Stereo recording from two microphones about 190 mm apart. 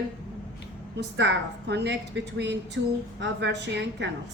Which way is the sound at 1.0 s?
70° right (ahead or behind).